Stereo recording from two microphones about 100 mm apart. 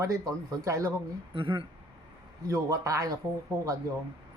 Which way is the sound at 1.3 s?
60° right (ahead or behind).